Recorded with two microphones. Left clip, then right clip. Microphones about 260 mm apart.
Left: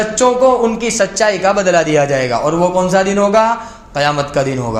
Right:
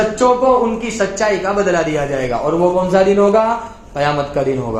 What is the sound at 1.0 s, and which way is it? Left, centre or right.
A man's voice, left.